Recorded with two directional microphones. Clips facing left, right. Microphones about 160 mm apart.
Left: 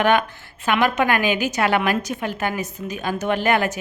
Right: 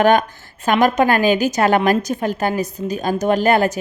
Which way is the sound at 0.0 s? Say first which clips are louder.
Right 4 dB; 40° right (ahead or behind).